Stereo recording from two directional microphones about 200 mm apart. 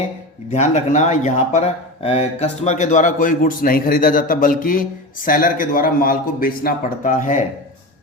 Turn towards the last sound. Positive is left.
turn(degrees=40)  # may be behind; listen again after turning